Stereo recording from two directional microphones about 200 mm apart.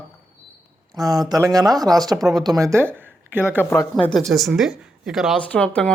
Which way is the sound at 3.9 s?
Centre (ahead or behind).